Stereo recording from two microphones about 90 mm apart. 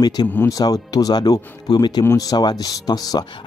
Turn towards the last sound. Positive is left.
turn(degrees=45)  # may be behind; listen again after turning